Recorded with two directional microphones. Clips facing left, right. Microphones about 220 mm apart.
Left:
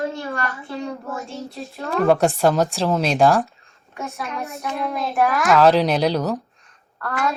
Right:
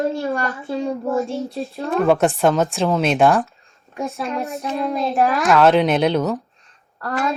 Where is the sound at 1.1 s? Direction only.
30° right (ahead or behind).